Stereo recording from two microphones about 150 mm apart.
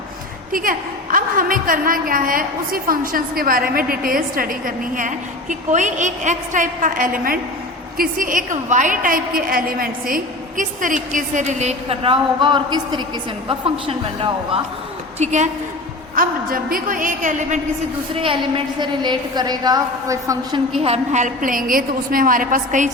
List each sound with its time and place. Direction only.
0.5 s a woman's voice: 65° right (ahead or behind); by 14.6 s 35° right (ahead or behind)
15.2 s a woman's voice: 50° right (ahead or behind)
16.1 s a woman's voice: 70° right (ahead or behind); by 17.6 s 55° right (ahead or behind)
18.1 s a woman's voice: 35° right (ahead or behind)
20.8 s a woman's voice: 50° right (ahead or behind)